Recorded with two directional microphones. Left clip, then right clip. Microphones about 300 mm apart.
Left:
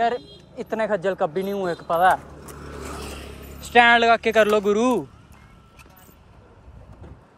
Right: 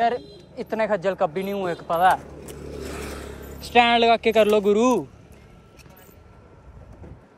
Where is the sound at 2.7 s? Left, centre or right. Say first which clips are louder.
Right 1 dB; left.